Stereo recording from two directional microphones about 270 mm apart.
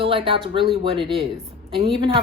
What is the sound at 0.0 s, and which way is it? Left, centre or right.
A woman's voice, centre.